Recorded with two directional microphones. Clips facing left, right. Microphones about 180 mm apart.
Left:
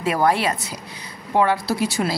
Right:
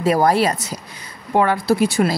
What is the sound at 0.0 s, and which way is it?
Speech, 40° right (ahead or behind).